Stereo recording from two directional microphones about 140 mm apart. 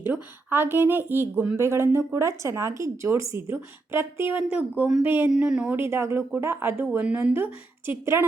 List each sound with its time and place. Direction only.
0.0 s speech: 15° right (ahead or behind)
5.4 s speech: 5° right (ahead or behind)
5.8 s speech: 20° right (ahead or behind)